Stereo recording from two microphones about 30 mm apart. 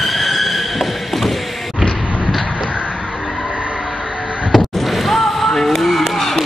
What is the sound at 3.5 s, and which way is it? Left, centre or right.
Vehicle, right.